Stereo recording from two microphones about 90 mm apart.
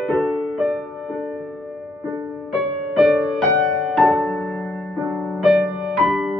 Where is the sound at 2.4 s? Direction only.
Centre (ahead or behind).